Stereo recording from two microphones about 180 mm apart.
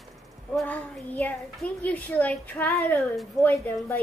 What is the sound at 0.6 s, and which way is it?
A child's voice, 10° left (ahead or behind).